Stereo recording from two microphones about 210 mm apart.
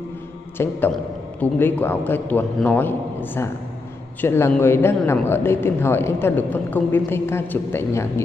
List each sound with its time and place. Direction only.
0.6 s a man's voice: 10° left (ahead or behind)